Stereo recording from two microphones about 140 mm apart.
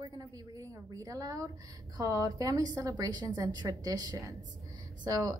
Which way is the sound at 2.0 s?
25° right (ahead or behind).